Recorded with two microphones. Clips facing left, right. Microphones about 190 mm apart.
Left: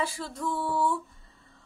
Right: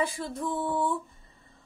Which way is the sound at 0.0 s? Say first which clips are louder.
Right 2 dB; 15° right (ahead or behind).